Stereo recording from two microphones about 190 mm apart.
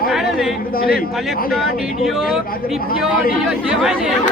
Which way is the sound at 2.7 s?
50° left (ahead or behind).